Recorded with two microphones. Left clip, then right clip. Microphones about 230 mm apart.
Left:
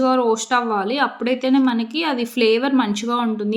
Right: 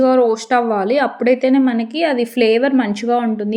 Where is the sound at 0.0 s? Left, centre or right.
Centre.